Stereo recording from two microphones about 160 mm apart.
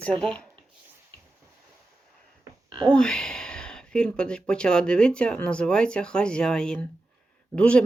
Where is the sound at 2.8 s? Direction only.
5° left (ahead or behind).